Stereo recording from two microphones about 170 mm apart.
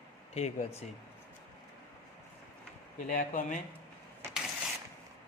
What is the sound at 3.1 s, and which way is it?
Speech, 45° left (ahead or behind).